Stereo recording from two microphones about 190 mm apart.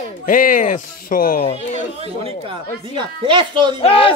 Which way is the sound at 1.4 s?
35° left (ahead or behind).